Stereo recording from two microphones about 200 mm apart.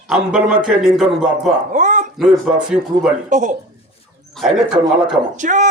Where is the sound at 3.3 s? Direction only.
40° right (ahead or behind).